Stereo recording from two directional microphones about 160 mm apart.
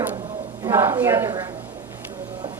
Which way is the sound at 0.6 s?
15° right (ahead or behind).